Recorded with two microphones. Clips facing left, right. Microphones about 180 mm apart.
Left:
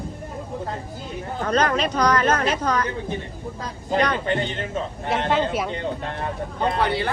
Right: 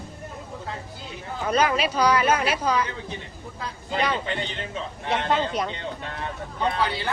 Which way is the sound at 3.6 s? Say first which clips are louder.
Left 4 dB; 45° left (ahead or behind).